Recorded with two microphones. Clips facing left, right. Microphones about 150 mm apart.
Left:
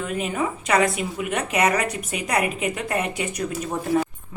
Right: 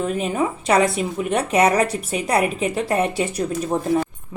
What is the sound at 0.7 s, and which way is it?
A woman's voice, 35° right (ahead or behind).